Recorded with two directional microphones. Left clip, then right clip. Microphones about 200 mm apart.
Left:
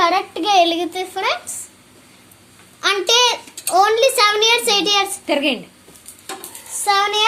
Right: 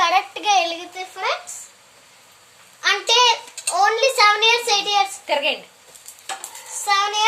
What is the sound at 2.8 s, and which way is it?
A child's voice, 50° left (ahead or behind).